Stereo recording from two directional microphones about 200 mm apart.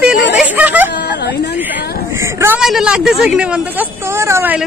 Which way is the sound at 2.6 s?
Centre (ahead or behind).